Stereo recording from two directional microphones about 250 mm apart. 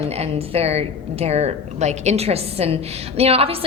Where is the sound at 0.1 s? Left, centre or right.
Right.